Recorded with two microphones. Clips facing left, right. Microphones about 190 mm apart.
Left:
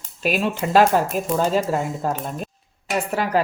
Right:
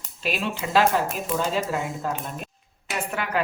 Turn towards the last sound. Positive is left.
turn(degrees=35)  # may be behind; listen again after turning